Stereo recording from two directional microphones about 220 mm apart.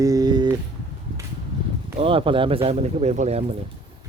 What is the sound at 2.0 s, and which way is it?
Speech, 25° right (ahead or behind).